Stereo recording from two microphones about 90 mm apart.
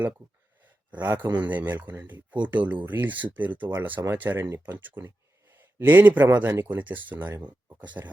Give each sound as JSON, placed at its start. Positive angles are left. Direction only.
{"t": 0.9, "sound": "speech", "side_deg": -20}